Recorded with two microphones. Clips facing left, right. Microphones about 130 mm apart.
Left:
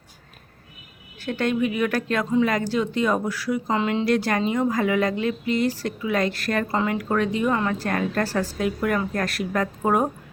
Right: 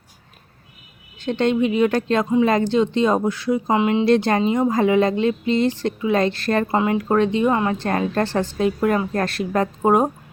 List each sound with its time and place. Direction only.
1.2 s speech: 25° right (ahead or behind)